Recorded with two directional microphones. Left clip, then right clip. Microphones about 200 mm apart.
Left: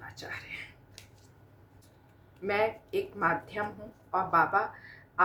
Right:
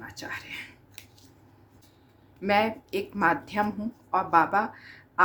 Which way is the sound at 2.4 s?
45° right (ahead or behind).